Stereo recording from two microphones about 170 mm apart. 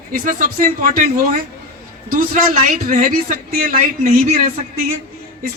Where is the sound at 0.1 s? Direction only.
55° right (ahead or behind).